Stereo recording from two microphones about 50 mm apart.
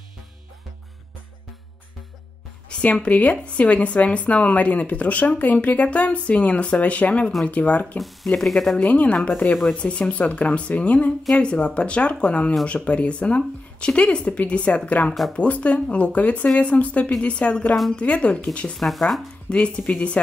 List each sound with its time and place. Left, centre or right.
2.7 s speech: left
8.3 s speech: centre
8.7 s speech: left
9.5 s speech: centre
9.8 s speech: left
18.8 s speech: centre
19.5 s speech: left